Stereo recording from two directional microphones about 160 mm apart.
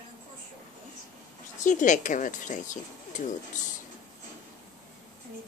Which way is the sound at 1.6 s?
50° left (ahead or behind).